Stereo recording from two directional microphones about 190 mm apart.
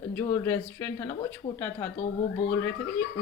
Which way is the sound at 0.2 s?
15° left (ahead or behind).